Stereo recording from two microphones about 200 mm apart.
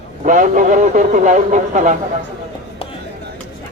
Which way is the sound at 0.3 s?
40° right (ahead or behind).